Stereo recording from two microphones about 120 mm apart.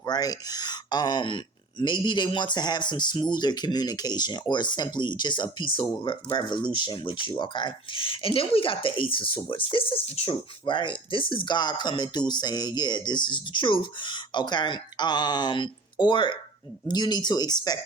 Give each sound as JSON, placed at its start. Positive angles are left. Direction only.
{"t": 0.0, "sound": "speech", "side_deg": 30}